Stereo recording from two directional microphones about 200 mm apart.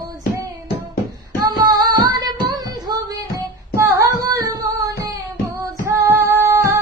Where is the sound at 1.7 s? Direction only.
20° right (ahead or behind).